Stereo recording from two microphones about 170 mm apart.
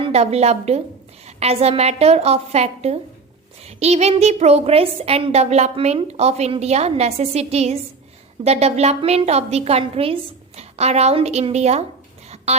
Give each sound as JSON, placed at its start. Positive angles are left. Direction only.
{"t": 0.0, "sound": "a woman's voice", "side_deg": -40}